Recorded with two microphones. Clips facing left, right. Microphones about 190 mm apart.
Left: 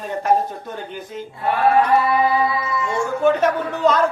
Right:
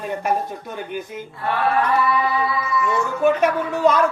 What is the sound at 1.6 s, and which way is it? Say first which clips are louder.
Speech: left 4 dB; 30° left (ahead or behind).